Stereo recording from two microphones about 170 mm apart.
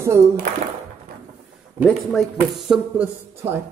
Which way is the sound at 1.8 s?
Centre (ahead or behind).